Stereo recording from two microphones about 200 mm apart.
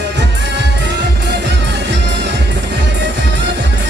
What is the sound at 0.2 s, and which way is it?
Music, 60° right (ahead or behind).